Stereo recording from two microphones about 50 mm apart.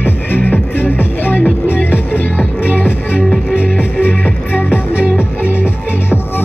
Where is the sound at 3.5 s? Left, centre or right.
Right.